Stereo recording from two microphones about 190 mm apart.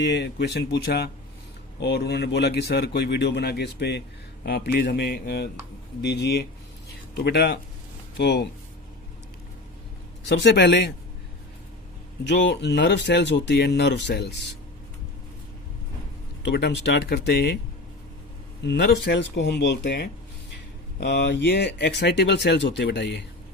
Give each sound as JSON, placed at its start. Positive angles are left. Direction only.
{"t": 0.0, "sound": "speech", "side_deg": 65}
{"t": 10.2, "sound": "speech", "side_deg": 65}
{"t": 12.2, "sound": "speech", "side_deg": 65}
{"t": 16.4, "sound": "speech", "side_deg": 65}
{"t": 18.6, "sound": "speech", "side_deg": 65}